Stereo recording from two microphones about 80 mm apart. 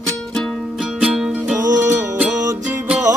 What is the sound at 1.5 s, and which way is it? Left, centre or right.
Music, right.